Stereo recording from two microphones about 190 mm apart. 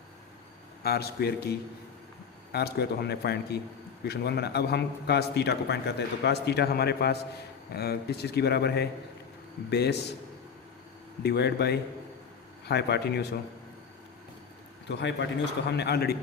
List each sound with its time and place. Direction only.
0.8 s a man's voice: 55° left (ahead or behind)
11.2 s a man's voice: 60° left (ahead or behind)
14.8 s a man's voice: 65° left (ahead or behind)